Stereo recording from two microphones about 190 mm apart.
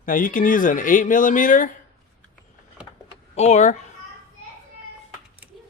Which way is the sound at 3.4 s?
35° left (ahead or behind).